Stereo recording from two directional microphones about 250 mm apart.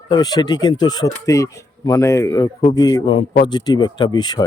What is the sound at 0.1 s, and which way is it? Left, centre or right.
A man's voice, centre.